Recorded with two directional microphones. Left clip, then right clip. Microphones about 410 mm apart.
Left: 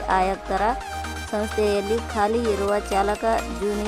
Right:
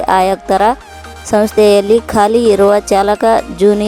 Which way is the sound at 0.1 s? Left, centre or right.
Centre.